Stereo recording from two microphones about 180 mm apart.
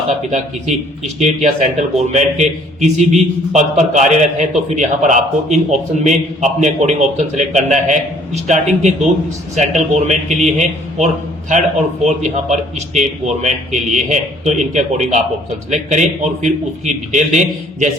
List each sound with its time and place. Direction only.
0.3 s a man's voice: 40° right (ahead or behind)